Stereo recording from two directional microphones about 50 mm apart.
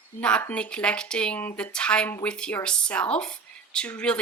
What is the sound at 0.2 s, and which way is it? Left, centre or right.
Speech, left.